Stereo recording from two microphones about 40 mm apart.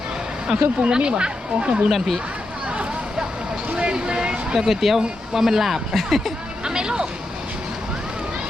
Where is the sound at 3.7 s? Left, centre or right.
Right.